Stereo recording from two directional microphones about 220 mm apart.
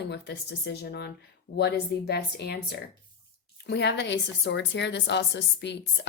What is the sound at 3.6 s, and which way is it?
A woman's voice, 50° left (ahead or behind).